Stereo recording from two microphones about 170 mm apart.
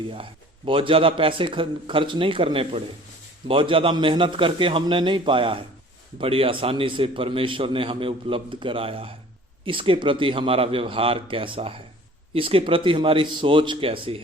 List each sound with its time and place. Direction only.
0.1 s a man's voice: 30° right (ahead or behind)